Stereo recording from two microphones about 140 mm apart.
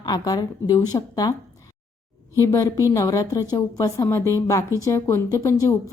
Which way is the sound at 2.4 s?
20° left (ahead or behind).